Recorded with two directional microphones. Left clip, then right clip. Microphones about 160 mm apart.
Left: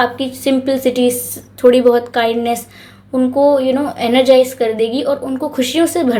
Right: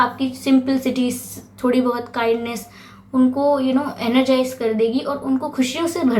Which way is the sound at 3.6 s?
40° left (ahead or behind).